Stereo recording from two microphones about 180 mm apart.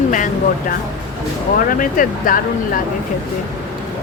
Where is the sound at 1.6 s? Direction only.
50° left (ahead or behind).